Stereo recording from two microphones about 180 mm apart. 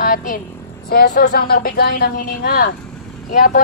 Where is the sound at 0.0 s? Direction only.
50° left (ahead or behind).